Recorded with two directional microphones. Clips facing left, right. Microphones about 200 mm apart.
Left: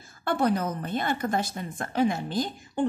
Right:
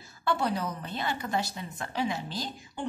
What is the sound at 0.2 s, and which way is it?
A woman's voice, 50° left (ahead or behind).